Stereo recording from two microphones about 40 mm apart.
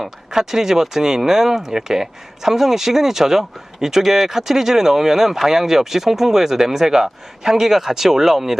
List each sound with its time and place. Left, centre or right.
0.0 s speech: centre